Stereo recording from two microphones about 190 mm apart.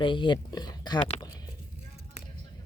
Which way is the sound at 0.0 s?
25° left (ahead or behind).